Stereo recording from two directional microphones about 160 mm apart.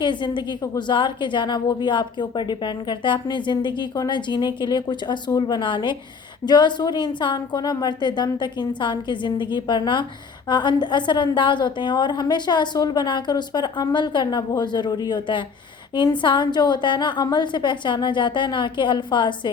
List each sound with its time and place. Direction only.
0.0 s a woman's voice: 30° left (ahead or behind)